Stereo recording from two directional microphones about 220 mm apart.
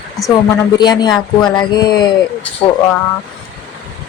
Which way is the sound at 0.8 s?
20° left (ahead or behind).